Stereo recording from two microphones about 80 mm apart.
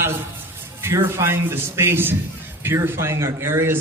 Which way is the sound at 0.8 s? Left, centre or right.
Right.